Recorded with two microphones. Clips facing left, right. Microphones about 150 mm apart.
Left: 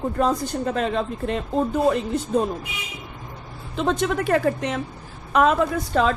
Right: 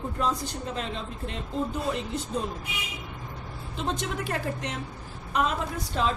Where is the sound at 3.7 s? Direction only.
70° left (ahead or behind).